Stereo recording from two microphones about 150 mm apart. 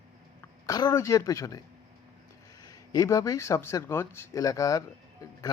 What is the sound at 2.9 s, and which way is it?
Speech, 20° left (ahead or behind).